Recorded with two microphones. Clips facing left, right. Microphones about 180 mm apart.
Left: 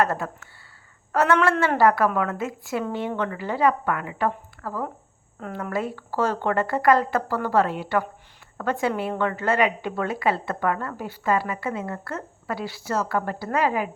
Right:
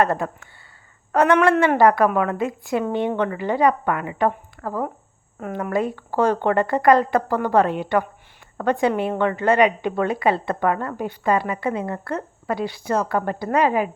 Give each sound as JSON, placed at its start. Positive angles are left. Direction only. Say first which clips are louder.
{"t": 0.0, "sound": "a woman's voice", "louder": "right 3 dB", "side_deg": -20}
{"t": 5.4, "sound": "a woman's voice", "louder": "right 5 dB", "side_deg": -15}